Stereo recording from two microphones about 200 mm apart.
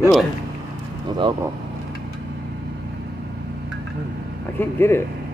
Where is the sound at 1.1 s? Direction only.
20° right (ahead or behind).